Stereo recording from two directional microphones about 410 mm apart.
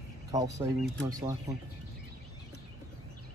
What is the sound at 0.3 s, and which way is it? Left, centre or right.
Speech, centre.